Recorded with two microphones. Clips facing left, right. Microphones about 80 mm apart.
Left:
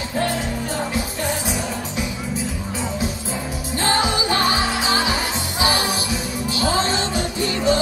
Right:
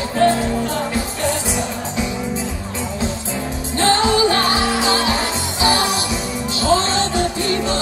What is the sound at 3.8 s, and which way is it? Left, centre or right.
Music, centre.